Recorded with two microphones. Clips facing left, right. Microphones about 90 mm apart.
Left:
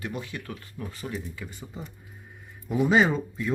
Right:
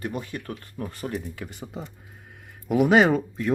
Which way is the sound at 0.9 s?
55° right (ahead or behind).